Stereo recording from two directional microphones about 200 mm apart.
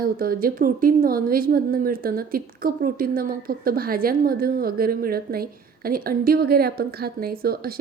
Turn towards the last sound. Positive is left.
turn(degrees=-50)  # may be behind; listen again after turning